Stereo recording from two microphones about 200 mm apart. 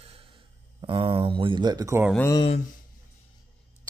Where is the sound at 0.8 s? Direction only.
25° right (ahead or behind).